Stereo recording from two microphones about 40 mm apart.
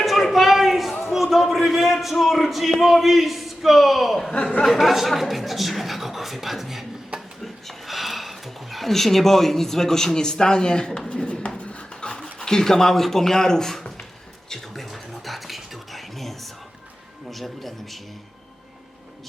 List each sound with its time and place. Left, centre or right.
0.0 s a sound: centre
1.5 s speech: centre
7.4 s a sound: centre; by 12.2 s left
12.2 s speech: centre
14.7 s music: centre
17.3 s speech: centre